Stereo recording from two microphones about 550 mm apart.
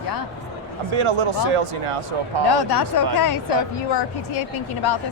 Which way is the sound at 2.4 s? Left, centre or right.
Left.